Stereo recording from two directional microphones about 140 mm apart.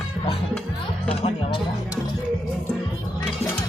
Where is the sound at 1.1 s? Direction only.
45° left (ahead or behind).